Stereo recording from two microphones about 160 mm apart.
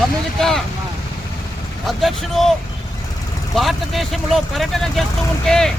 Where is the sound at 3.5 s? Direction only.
Centre (ahead or behind).